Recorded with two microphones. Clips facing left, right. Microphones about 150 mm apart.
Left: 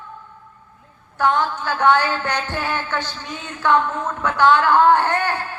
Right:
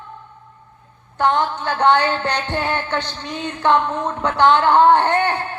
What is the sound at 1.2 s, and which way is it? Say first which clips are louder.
A man's voice: right 1 dB; 20° right (ahead or behind).